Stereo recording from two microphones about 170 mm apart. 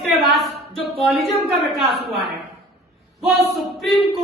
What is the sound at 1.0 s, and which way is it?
Speech, centre (ahead or behind).